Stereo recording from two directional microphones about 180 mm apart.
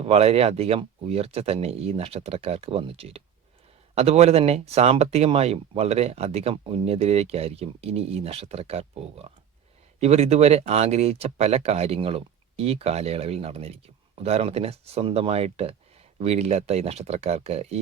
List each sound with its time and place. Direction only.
0.0 s speech: 35° right (ahead or behind)